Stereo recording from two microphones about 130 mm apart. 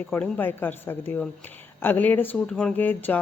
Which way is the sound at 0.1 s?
15° left (ahead or behind).